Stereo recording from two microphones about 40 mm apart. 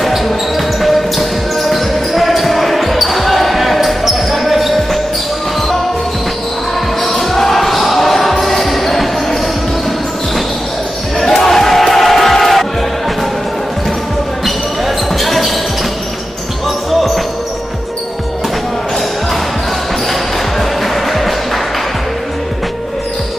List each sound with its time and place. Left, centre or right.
0.0 s basketball bounce: centre
7.0 s basketball bounce: centre
11.1 s crowd: centre
15.1 s basketball bounce: centre
16.6 s basketball bounce: centre
20.1 s basketball bounce: centre